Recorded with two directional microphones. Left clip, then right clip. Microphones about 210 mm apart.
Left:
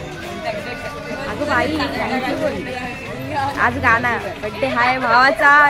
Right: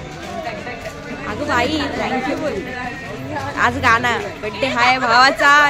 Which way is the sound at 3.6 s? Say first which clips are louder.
Right 2 dB; 15° right (ahead or behind).